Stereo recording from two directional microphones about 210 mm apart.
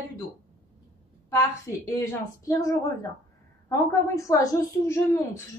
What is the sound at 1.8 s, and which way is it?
A woman's voice, 15° left (ahead or behind).